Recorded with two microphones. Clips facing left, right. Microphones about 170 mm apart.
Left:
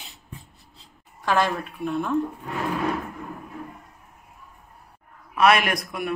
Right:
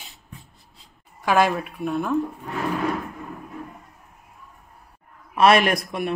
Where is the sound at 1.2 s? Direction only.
10° right (ahead or behind).